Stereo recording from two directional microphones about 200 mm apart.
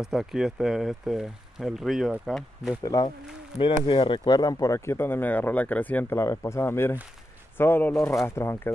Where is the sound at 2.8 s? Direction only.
20° left (ahead or behind).